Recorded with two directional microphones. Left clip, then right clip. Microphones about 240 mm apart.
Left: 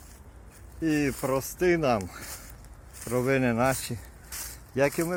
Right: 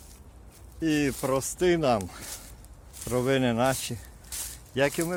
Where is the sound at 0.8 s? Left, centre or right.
Centre.